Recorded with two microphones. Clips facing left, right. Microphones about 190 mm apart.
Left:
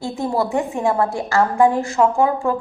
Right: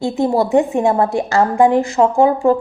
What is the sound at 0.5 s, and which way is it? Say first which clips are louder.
A woman's voice: right 6 dB; 20° right (ahead or behind).